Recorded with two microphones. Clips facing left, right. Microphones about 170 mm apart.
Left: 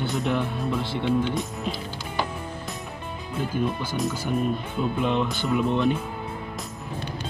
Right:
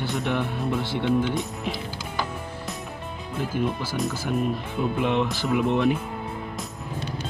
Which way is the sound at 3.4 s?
5° right (ahead or behind).